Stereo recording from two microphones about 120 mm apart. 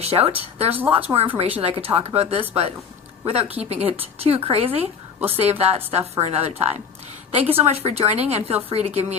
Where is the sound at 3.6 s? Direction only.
65° right (ahead or behind).